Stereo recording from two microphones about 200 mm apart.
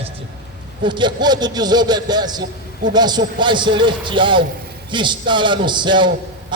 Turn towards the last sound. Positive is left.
turn(degrees=-25)  # may be behind; listen again after turning